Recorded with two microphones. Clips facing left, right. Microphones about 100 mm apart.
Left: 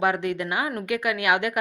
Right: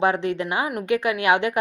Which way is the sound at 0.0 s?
30° right (ahead or behind).